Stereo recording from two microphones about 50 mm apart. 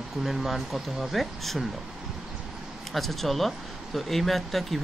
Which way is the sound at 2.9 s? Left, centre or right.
Centre.